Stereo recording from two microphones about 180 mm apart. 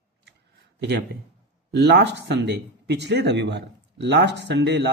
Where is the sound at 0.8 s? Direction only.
70° right (ahead or behind).